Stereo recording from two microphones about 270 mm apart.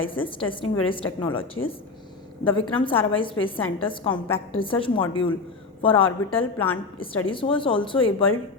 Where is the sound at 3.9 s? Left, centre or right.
Centre.